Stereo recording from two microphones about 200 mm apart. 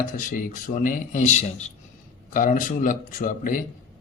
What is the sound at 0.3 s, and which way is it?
Speech, 40° left (ahead or behind).